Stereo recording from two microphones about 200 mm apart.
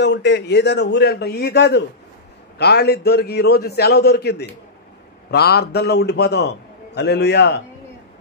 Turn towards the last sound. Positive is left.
turn(degrees=55)  # may be behind; listen again after turning